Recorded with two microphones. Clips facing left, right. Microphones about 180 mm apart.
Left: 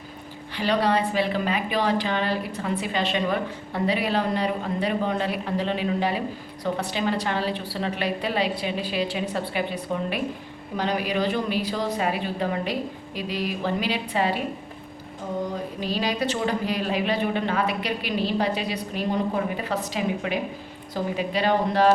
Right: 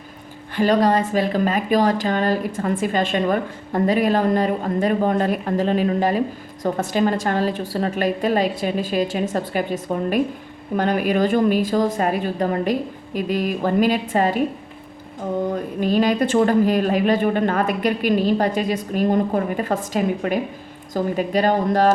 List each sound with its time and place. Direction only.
0.5 s a woman's voice: 45° right (ahead or behind)
15.8 s a woman's voice: 50° right (ahead or behind)